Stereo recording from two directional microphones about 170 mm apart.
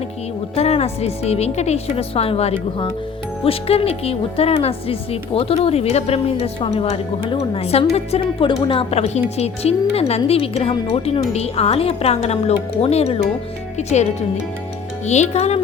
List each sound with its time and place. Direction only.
0.5 s a woman's voice: 35° left (ahead or behind)